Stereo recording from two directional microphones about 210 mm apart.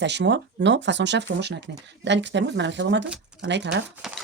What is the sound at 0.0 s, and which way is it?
Speech, 55° right (ahead or behind).